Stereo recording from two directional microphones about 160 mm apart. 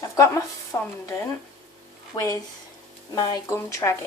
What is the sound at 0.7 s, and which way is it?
Speech, 15° left (ahead or behind).